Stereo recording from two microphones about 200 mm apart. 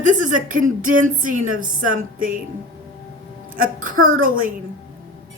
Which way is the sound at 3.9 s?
90° right.